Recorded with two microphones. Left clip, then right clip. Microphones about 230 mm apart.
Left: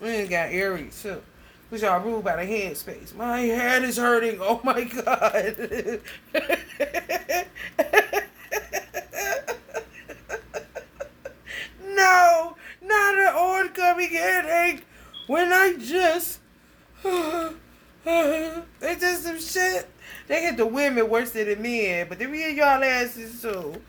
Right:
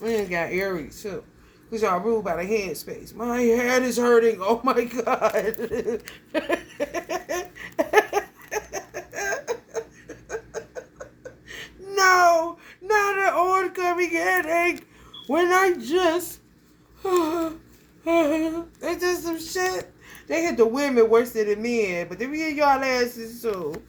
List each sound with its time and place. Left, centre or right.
0.0 s speech: centre
8.9 s giggle: centre
10.2 s chuckle: centre
11.5 s baby cry: centre
12.9 s a sound: centre
15.3 s speech: centre